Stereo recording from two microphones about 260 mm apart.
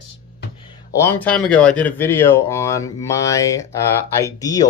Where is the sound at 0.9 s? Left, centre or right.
Centre.